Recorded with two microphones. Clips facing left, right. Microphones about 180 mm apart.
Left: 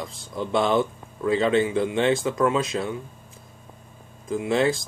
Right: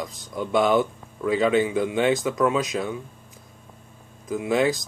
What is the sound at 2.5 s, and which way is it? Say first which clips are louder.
Speech: even; 30° left (ahead or behind).